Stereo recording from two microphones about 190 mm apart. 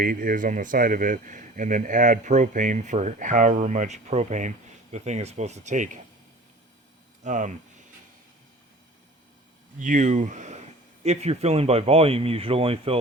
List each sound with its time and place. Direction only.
0.0 s speech: 45° right (ahead or behind)
7.3 s speech: 40° right (ahead or behind)
9.7 s speech: 40° right (ahead or behind)